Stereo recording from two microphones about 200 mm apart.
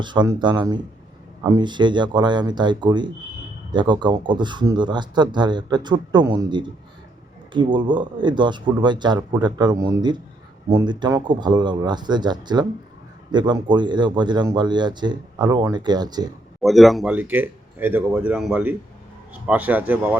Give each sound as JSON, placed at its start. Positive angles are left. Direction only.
{"t": 0.0, "sound": "speech", "side_deg": -20}
{"t": 16.6, "sound": "speech", "side_deg": 0}